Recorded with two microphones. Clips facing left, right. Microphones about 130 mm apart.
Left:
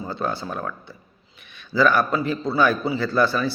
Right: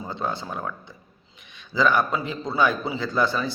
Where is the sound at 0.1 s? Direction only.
20° right (ahead or behind).